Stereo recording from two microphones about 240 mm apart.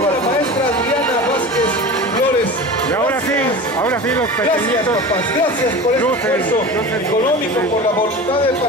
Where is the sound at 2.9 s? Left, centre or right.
Centre.